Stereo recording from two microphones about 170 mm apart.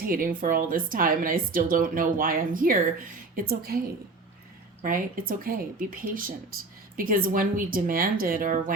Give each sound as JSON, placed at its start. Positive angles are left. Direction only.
{"t": 0.0, "sound": "speech", "side_deg": -55}